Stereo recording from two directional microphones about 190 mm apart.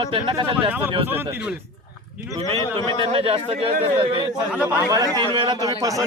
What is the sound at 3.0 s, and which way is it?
Speech, 30° right (ahead or behind).